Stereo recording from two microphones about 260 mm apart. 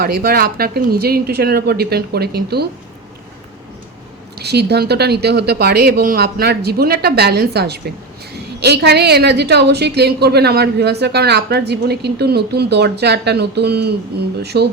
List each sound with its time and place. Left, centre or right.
0.0 s a woman's voice: right
4.4 s a woman's voice: right